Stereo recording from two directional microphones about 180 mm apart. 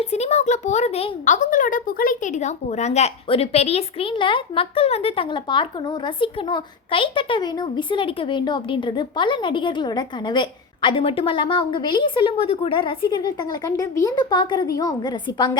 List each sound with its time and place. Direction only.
0.0 s a woman's voice: 35° left (ahead or behind)